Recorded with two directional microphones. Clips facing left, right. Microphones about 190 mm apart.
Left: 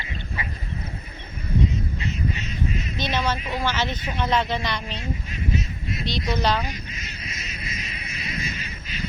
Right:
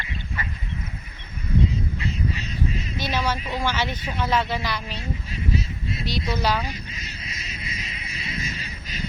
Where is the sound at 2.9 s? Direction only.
10° right (ahead or behind).